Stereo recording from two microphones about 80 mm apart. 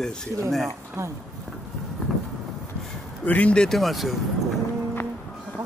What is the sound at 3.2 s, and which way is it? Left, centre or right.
Speech, centre.